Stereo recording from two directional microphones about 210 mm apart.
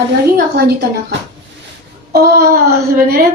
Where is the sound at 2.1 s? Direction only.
45° right (ahead or behind).